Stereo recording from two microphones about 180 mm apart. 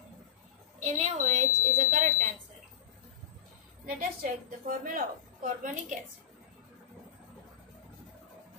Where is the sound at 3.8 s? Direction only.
50° right (ahead or behind).